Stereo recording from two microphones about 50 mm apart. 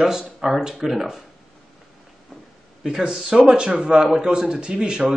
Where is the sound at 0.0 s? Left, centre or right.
Centre.